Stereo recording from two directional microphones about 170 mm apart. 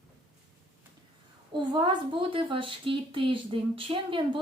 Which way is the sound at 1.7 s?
30° right (ahead or behind).